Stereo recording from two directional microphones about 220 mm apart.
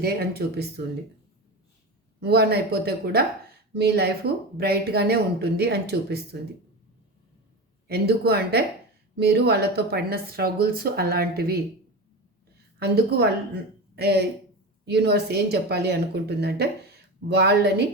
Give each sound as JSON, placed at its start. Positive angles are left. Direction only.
{"t": 0.0, "sound": "speech", "side_deg": -45}
{"t": 2.2, "sound": "speech", "side_deg": -45}
{"t": 7.9, "sound": "speech", "side_deg": -45}
{"t": 12.8, "sound": "speech", "side_deg": -45}